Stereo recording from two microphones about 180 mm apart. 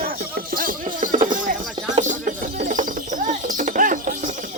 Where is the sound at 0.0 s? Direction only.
55° right (ahead or behind).